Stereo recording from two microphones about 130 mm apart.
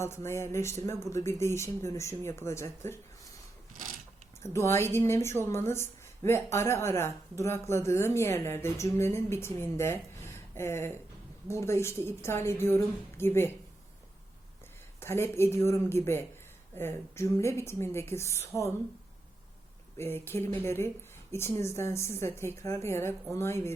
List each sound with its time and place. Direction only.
0.0 s speech: 20° left (ahead or behind)
4.5 s speech: 20° left (ahead or behind)
15.0 s speech: 20° left (ahead or behind)
20.0 s speech: 15° left (ahead or behind)